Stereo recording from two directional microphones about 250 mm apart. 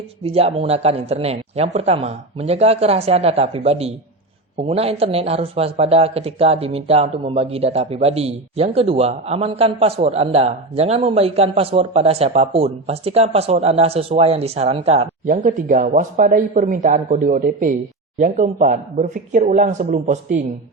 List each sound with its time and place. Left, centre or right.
0.2 s a man's voice: right